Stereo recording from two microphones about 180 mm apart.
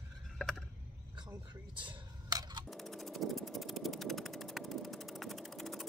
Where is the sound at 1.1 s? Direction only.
25° right (ahead or behind).